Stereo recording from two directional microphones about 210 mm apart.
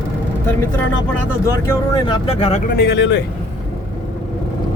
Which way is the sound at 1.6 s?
25° left (ahead or behind).